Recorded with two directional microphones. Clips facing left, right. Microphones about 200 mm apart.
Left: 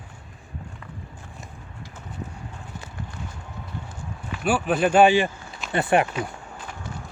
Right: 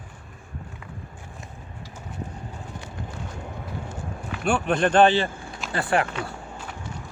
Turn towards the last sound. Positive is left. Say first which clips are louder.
# left 3 dB
turn(degrees=20)  # may be behind; listen again after turning